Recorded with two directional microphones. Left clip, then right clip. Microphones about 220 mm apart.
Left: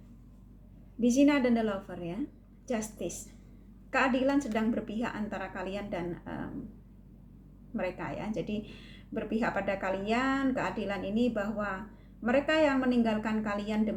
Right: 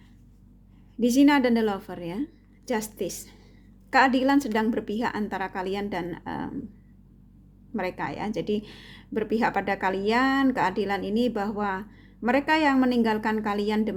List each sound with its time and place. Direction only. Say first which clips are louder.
0.9 s a woman's voice: right 5 dB; 50° right (ahead or behind)
7.8 s a woman's voice: right 5 dB; 50° right (ahead or behind)